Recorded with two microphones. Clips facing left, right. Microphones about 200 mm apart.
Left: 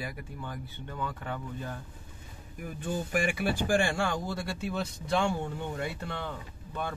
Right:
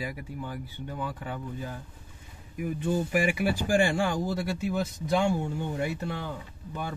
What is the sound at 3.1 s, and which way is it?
Speech, 10° right (ahead or behind).